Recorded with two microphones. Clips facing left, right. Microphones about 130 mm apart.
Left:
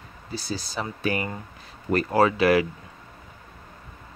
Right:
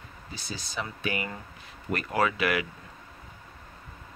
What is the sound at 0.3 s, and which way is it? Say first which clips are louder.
Speech: left 8 dB; 35° left (ahead or behind).